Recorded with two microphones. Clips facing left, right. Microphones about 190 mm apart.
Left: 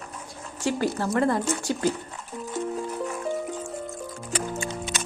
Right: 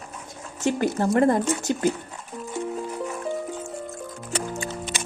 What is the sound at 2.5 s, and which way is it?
Music, centre (ahead or behind).